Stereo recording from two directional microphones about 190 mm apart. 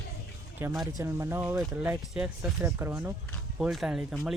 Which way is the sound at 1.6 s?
5° right (ahead or behind).